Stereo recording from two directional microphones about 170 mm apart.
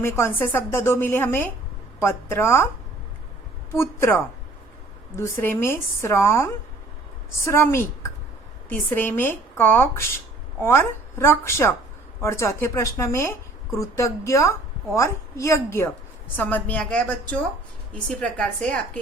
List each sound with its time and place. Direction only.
0.0 s a woman's voice: 15° left (ahead or behind)
3.8 s a woman's voice: 15° left (ahead or behind)